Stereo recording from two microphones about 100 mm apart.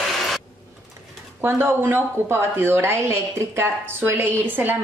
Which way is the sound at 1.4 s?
25° right (ahead or behind).